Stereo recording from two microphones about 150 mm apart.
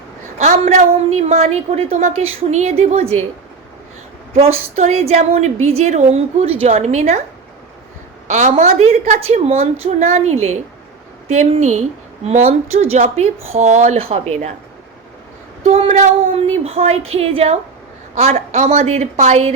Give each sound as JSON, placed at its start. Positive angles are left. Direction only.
{"t": 0.3, "sound": "a woman's voice", "side_deg": -50}
{"t": 4.4, "sound": "a woman's voice", "side_deg": -45}
{"t": 8.3, "sound": "a woman's voice", "side_deg": -50}
{"t": 15.6, "sound": "a woman's voice", "side_deg": -45}
{"t": 18.3, "sound": "a woman's voice", "side_deg": -55}